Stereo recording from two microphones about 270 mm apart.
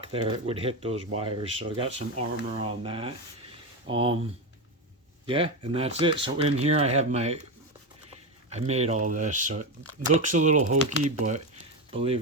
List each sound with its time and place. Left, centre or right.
0.0 s speech: centre
5.2 s speech: centre
8.4 s speech: right